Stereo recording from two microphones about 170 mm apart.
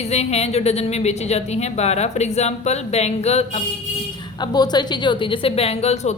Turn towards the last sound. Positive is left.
turn(degrees=40)  # may be behind; listen again after turning